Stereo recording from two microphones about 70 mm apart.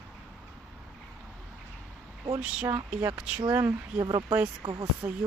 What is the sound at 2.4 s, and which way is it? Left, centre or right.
Speech, centre.